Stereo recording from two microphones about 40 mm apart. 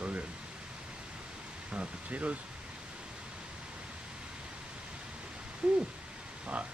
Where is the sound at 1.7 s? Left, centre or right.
Right.